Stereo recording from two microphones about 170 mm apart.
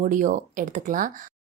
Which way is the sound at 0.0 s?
50° right (ahead or behind).